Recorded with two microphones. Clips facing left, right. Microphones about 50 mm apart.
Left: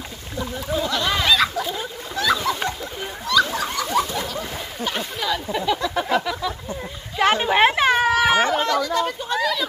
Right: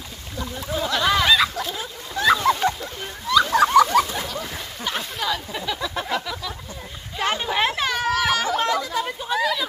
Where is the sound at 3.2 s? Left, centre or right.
Centre.